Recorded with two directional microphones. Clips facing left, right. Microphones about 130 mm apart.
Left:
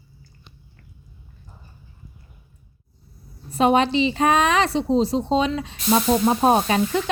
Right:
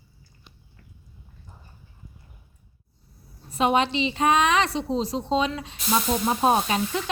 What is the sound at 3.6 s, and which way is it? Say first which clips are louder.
Speech: left 4 dB; 35° left (ahead or behind).